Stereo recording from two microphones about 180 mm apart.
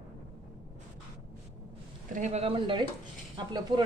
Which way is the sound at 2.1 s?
40° right (ahead or behind).